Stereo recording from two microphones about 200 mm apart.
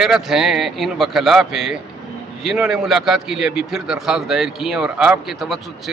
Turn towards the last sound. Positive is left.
turn(degrees=0)  # may be behind; listen again after turning